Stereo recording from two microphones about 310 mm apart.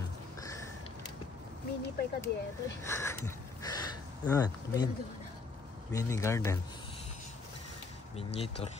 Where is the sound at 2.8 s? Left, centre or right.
Centre.